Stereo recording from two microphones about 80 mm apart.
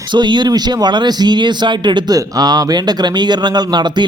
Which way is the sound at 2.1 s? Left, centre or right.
Right.